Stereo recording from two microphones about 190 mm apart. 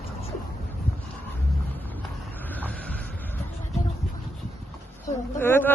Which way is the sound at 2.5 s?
10° left (ahead or behind).